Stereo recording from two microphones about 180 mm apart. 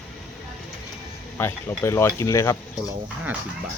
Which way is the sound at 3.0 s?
5° right (ahead or behind).